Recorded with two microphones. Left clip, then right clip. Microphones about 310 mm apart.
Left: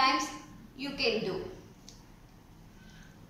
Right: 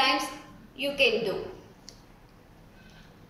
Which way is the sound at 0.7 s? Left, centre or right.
Centre.